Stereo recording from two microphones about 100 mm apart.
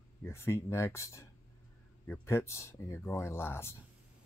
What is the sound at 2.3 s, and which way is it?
Speech, 30° left (ahead or behind).